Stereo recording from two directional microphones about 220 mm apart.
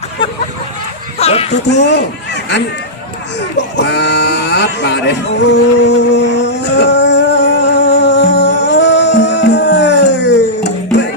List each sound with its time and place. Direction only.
1.2 s a sound: 30° left (ahead or behind)
1.7 s speech: 50° left (ahead or behind)
3.8 s speech: 50° left (ahead or behind)
6.0 s music: 50° left (ahead or behind)